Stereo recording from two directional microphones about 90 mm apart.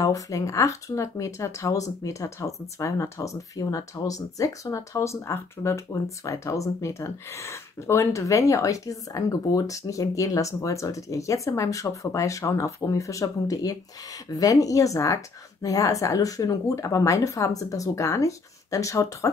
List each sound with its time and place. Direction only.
0.0 s speech: 40° left (ahead or behind)